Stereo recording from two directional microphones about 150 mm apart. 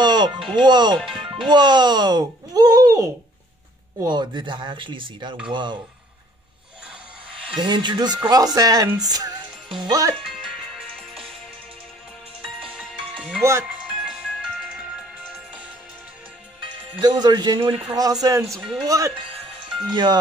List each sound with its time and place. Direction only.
0.0 s music: 30° right (ahead or behind)
0.5 s speech: 30° right (ahead or behind)
0.9 s speech: centre (ahead or behind)
1.5 s speech: 30° right (ahead or behind)
4.1 s speech: 30° right (ahead or behind)
7.4 s speech: 30° right (ahead or behind)
12.6 s music: 5° right (ahead or behind)
13.4 s speech: 20° right (ahead or behind)
17.0 s speech: 30° right (ahead or behind)
17.9 s speech: 25° right (ahead or behind)
18.5 s speech: centre (ahead or behind)
18.9 s speech: 20° right (ahead or behind)